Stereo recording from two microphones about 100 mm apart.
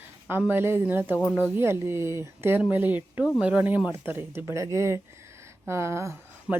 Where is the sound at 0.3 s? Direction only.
20° right (ahead or behind).